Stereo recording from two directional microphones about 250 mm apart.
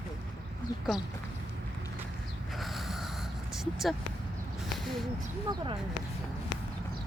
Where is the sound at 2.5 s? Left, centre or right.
Centre.